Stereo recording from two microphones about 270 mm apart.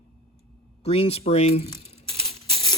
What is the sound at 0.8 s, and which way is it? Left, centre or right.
Speech, left.